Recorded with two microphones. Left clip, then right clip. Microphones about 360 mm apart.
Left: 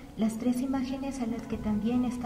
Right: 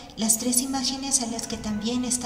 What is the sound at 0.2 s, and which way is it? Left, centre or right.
A woman's voice, right.